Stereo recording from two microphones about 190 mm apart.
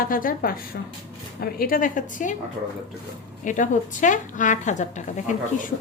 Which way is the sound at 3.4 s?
40° left (ahead or behind).